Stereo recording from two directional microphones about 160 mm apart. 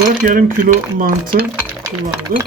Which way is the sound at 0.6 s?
60° right (ahead or behind).